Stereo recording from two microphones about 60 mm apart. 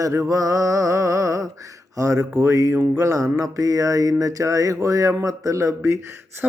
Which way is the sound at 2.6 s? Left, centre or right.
Right.